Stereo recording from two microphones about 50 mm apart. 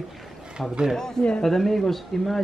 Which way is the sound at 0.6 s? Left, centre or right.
Centre.